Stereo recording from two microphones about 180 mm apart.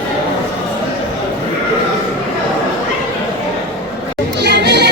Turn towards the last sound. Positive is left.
turn(degrees=-70)  # may be behind; listen again after turning